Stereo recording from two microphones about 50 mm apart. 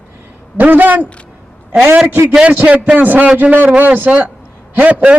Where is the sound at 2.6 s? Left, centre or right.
Right.